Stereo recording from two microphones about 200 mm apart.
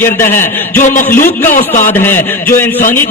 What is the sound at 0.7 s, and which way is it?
Speech, 40° left (ahead or behind).